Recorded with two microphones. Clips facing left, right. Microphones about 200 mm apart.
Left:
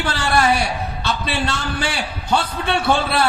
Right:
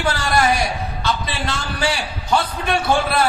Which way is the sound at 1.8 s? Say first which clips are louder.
Right 2 dB; 30° left (ahead or behind).